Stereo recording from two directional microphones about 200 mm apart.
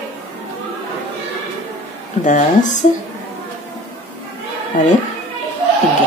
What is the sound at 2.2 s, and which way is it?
Speech, 40° left (ahead or behind).